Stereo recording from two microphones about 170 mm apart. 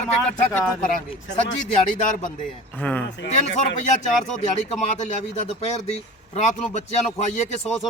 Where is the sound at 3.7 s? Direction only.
45° left (ahead or behind).